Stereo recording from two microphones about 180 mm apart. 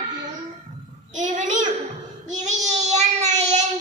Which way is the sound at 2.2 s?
40° right (ahead or behind).